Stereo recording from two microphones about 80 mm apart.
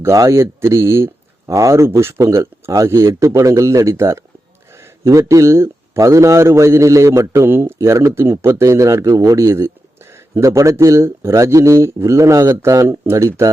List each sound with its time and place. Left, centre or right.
0.0 s a man's voice: right